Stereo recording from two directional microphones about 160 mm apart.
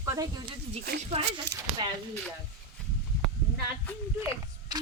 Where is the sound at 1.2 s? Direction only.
35° right (ahead or behind).